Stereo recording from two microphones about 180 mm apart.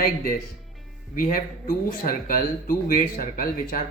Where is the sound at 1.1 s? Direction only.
50° left (ahead or behind).